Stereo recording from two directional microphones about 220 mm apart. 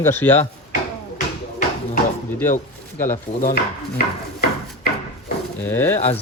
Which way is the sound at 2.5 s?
35° left (ahead or behind).